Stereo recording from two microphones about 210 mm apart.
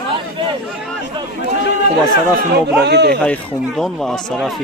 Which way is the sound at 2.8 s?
50° right (ahead or behind).